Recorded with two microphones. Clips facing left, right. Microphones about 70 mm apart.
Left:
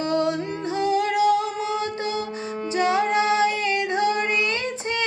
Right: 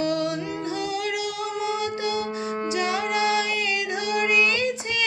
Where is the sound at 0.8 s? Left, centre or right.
Left.